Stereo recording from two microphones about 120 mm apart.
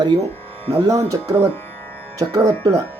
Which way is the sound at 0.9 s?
25° right (ahead or behind).